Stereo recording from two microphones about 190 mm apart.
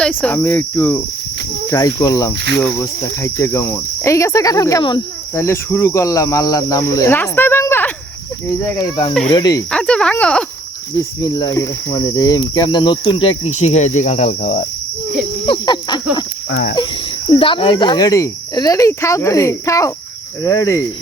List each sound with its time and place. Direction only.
0.0 s insect: 5° left (ahead or behind); by 9.1 s 20° left (ahead or behind)
9.3 s cricket: 20° left (ahead or behind)
9.6 s speech: 5° left (ahead or behind)
10.9 s cricket: 20° left (ahead or behind)
13.5 s cricket: 35° left (ahead or behind)
15.4 s cricket: 25° left (ahead or behind)
16.5 s speech: 55° left (ahead or behind)
17.4 s insect: 25° left (ahead or behind)